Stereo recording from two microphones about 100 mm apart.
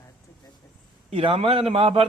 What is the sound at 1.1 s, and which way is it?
A man's voice, 65° right (ahead or behind).